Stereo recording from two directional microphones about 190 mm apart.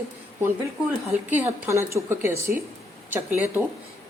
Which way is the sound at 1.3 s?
10° right (ahead or behind).